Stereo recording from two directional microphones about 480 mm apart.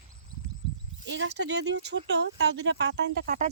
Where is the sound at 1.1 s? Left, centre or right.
Right.